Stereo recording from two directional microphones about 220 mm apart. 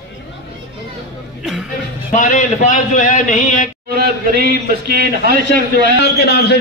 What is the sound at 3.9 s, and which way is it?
A man's voice, 45° right (ahead or behind).